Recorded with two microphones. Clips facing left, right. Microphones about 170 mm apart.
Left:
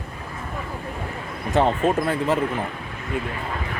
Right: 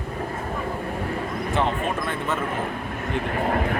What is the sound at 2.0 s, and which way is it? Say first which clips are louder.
Speech: left 5 dB; 35° left (ahead or behind).